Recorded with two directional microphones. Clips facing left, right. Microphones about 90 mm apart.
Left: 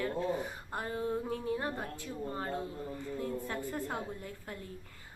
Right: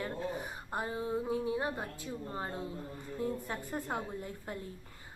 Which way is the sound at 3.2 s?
20° right (ahead or behind).